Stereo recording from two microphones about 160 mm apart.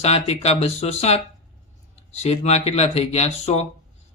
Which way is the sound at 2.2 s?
40° left (ahead or behind).